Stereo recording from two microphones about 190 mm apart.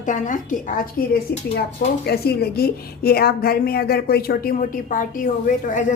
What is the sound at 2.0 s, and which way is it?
Speech, 55° left (ahead or behind).